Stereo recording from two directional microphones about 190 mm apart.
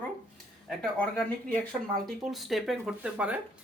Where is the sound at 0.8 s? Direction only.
5° left (ahead or behind).